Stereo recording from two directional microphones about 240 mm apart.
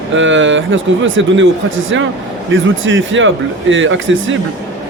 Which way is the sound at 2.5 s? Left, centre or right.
Right.